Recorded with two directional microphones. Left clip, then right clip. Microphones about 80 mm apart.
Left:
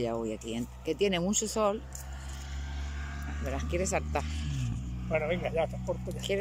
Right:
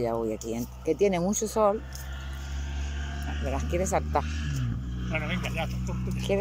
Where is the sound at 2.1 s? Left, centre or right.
Centre.